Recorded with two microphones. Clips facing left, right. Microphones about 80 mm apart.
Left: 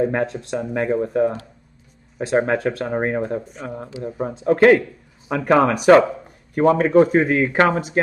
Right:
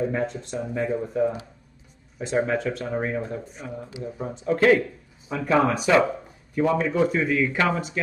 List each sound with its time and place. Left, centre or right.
0.0 s speech: left
5.3 s speech: left